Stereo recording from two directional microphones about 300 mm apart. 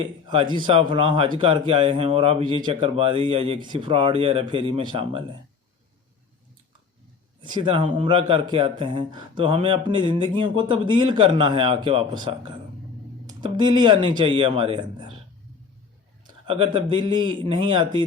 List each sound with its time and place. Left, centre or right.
0.0 s speech: centre
7.4 s speech: centre
16.2 s a sound: centre
17.2 s speech: centre